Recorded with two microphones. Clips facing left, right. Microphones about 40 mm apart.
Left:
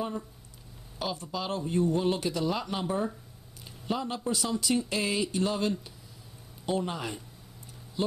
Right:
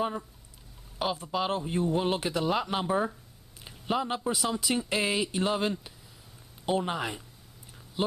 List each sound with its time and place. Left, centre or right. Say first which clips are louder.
0.9 s speech: right 4 dB; right
3.6 s a sound: right 3 dB; right
4.3 s speech: left 3 dB; centre